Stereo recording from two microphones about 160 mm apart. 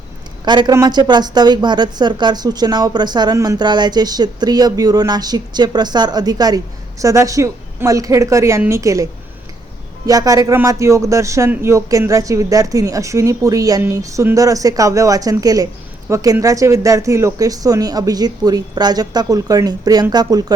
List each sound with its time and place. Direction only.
0.4 s a woman's voice: 25° right (ahead or behind)
10.1 s a woman's voice: 20° right (ahead or behind)